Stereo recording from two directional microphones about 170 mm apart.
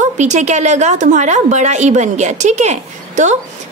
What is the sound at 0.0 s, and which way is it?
A woman's voice, 45° right (ahead or behind).